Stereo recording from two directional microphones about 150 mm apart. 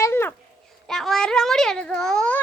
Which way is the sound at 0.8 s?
5° left (ahead or behind).